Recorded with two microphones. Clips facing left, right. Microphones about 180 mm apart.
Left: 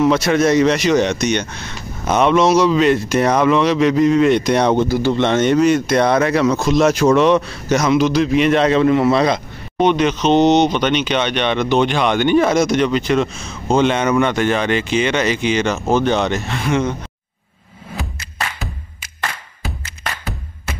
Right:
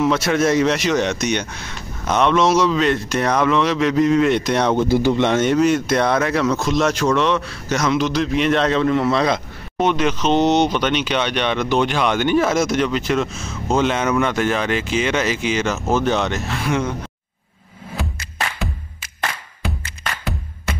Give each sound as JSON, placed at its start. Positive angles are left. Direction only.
{"t": 0.0, "sound": "speech", "side_deg": 0}
{"t": 2.0, "sound": "speech", "side_deg": 5}
{"t": 4.8, "sound": "speech", "side_deg": -25}
{"t": 5.1, "sound": "speech", "side_deg": -10}